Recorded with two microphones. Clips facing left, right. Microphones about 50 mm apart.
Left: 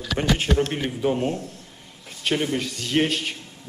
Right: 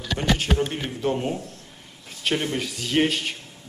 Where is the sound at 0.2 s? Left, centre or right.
Left.